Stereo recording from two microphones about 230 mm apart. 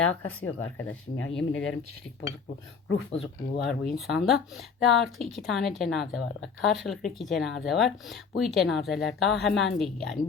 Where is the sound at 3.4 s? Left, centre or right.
Left.